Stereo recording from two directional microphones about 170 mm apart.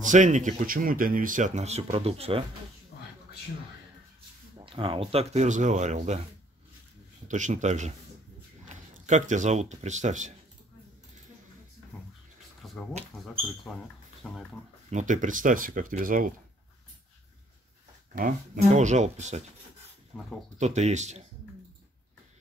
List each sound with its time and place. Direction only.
0.0 s speech: 45° right (ahead or behind)
4.6 s speech: 30° right (ahead or behind)
7.2 s speech: 45° right (ahead or behind)
12.6 s a sound: 5° left (ahead or behind)
13.4 s speech: 5° left (ahead or behind)
14.9 s speech: 45° right (ahead or behind)
18.1 s speech: 50° right (ahead or behind)
20.1 s speech: 5° left (ahead or behind)
20.5 s speech: 40° right (ahead or behind)